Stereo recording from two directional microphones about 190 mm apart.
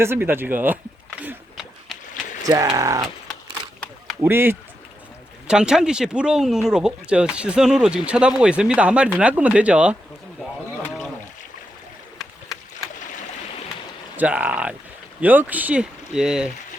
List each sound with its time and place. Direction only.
0.0 s speech: 10° right (ahead or behind)
1.2 s a sound: 5° right (ahead or behind)
2.4 s speech: 20° right (ahead or behind)
4.2 s speech: 10° right (ahead or behind)
14.2 s speech: 10° right (ahead or behind)